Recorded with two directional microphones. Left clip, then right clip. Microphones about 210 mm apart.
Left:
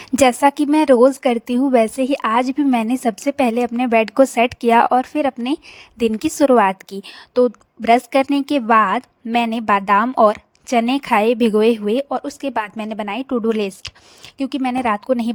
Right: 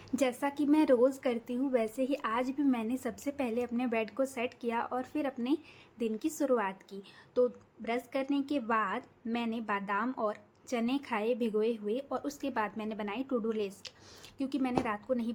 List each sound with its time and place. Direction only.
0.0 s a woman's voice: 50° left (ahead or behind)